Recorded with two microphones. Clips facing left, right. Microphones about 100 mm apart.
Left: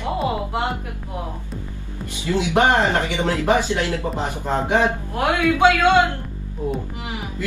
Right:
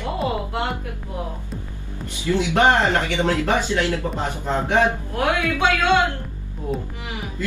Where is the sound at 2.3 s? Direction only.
20° left (ahead or behind).